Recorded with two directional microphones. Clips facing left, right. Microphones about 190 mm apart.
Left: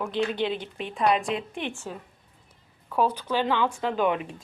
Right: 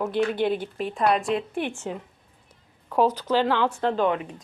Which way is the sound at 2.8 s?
10° right (ahead or behind).